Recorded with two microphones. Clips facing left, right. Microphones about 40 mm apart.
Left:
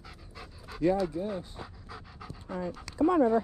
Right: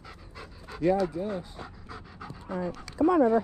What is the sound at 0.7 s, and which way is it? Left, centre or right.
Dog, centre.